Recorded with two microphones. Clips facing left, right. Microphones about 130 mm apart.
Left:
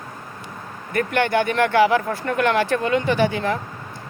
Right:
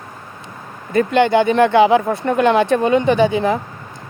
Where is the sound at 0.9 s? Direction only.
25° right (ahead or behind).